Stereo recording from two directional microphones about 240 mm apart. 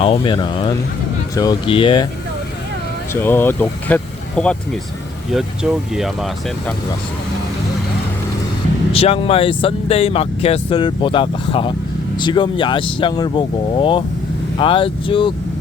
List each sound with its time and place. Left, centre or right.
0.0 s speech: left
3.1 s speech: centre
8.9 s speech: left